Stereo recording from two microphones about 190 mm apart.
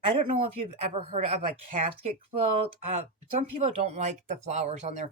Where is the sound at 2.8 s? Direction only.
35° right (ahead or behind).